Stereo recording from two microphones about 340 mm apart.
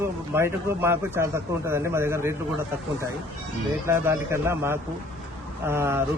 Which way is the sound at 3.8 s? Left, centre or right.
Centre.